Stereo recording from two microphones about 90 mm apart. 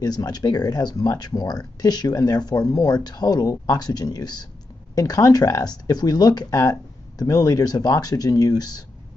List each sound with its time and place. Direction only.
0.0 s speech: 45° left (ahead or behind)